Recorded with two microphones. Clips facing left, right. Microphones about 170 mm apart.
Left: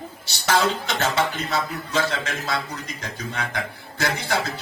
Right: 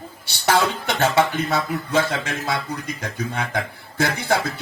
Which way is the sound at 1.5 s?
55° right (ahead or behind).